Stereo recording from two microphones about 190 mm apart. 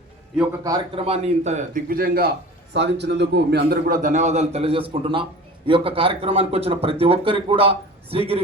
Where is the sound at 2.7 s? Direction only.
70° right (ahead or behind).